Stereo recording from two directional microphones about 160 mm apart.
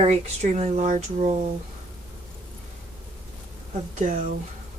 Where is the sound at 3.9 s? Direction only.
50° right (ahead or behind).